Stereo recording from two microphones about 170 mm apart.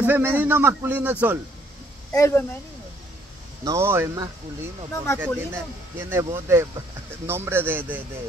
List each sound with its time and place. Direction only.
0.0 s a man's voice: 10° right (ahead or behind)
2.1 s speech: 15° left (ahead or behind)
3.6 s a man's voice: 15° right (ahead or behind)